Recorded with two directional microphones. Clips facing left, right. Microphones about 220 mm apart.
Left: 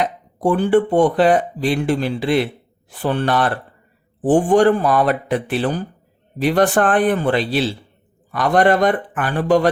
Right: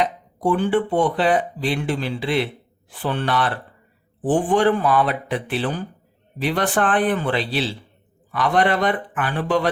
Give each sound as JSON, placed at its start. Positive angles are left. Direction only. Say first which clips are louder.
{"t": 0.0, "sound": "speech", "louder": "left 2 dB", "side_deg": 45}